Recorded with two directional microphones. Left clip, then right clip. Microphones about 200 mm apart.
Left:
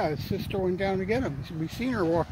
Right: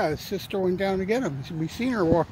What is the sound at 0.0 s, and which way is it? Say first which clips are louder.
Speech: right 3 dB; 25° right (ahead or behind).